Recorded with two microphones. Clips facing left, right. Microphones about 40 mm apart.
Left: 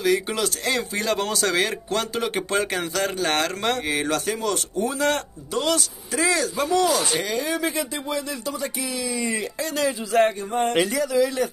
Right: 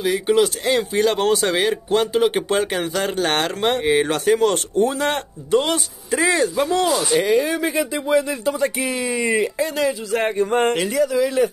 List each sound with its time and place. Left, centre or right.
0.0 s speech: centre
1.6 s speech: centre
3.2 s speech: right
3.4 s speech: right
4.3 s speech: right
7.2 s speech: centre
8.1 s speech: right
8.5 s speech: right
9.8 s speech: centre
10.4 s speech: right
10.8 s speech: centre
11.2 s speech: centre